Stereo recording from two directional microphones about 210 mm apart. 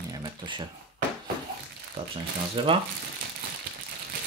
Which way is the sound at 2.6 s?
25° right (ahead or behind).